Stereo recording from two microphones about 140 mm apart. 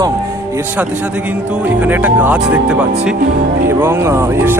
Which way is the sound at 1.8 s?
10° right (ahead or behind).